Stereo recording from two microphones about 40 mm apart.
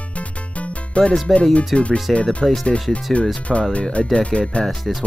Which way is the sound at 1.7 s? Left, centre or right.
Left.